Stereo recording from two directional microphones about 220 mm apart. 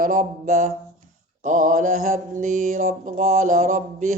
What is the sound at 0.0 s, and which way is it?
Mantra, 35° right (ahead or behind).